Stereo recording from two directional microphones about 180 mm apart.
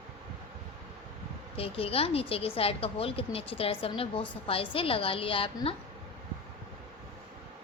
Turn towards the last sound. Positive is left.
turn(degrees=30)  # may be behind; listen again after turning